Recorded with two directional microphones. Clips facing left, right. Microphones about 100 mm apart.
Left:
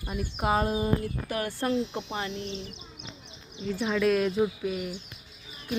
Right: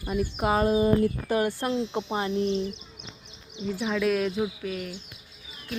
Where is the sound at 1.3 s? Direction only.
20° right (ahead or behind); by 2.6 s 40° right (ahead or behind).